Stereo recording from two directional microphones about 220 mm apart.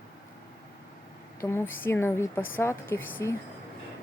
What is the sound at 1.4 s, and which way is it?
A woman's voice, 10° left (ahead or behind).